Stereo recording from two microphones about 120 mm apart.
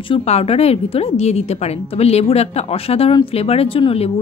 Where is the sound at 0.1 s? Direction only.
60° left (ahead or behind).